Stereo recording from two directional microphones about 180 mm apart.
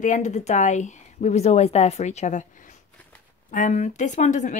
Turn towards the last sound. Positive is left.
turn(degrees=45)  # may be behind; listen again after turning